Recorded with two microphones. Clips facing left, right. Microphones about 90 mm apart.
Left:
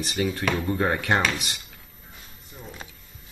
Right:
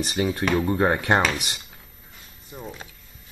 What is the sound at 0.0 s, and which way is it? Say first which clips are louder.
Speech: right 2 dB; 35° right (ahead or behind).